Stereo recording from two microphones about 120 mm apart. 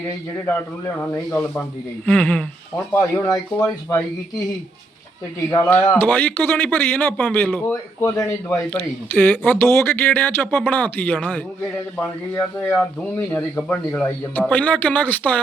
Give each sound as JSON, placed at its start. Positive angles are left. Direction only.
{"t": 0.9, "sound": "speech", "side_deg": 25}
{"t": 2.0, "sound": "speech", "side_deg": 10}
{"t": 2.9, "sound": "speech", "side_deg": 25}
{"t": 5.5, "sound": "speech", "side_deg": 20}
{"t": 8.0, "sound": "speech", "side_deg": 25}
{"t": 8.7, "sound": "speech", "side_deg": 15}